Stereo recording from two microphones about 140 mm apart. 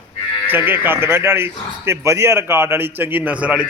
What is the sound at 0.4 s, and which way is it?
Speech, 15° right (ahead or behind).